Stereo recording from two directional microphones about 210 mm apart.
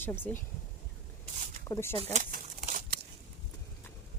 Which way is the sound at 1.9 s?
30° right (ahead or behind).